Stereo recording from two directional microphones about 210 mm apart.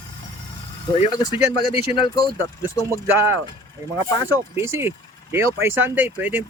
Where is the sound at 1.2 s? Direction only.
20° left (ahead or behind).